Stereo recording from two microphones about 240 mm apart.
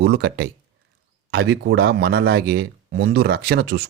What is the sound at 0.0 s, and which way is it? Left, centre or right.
Speech, right.